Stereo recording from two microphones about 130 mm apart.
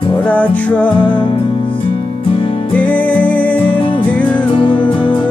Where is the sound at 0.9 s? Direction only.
40° left (ahead or behind).